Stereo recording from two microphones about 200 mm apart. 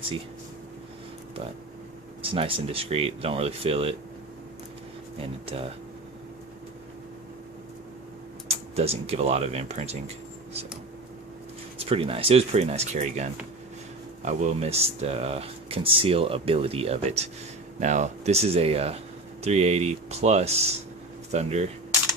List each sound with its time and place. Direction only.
2.2 s speech: 25° right (ahead or behind)
8.5 s speech: 30° right (ahead or behind)
11.8 s speech: 30° right (ahead or behind)